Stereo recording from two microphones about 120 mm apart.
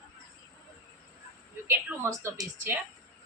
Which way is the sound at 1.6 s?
20° right (ahead or behind).